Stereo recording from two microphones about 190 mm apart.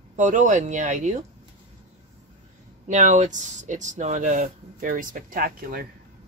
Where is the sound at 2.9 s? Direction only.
40° right (ahead or behind).